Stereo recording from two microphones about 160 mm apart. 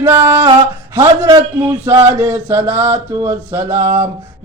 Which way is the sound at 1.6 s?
15° right (ahead or behind).